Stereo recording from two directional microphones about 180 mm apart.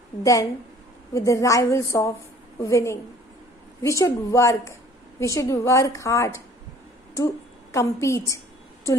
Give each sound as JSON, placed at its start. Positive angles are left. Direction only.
{"t": 0.2, "sound": "a woman's voice", "side_deg": 20}
{"t": 7.7, "sound": "a woman's voice", "side_deg": 15}